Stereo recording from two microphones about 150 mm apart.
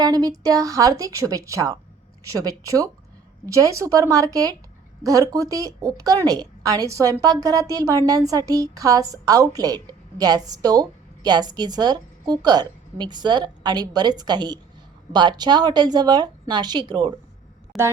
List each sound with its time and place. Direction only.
0.0 s a woman's voice: 25° right (ahead or behind)
17.7 s speech: centre (ahead or behind)